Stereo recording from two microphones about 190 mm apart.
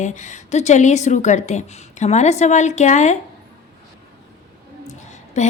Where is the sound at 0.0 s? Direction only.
40° left (ahead or behind).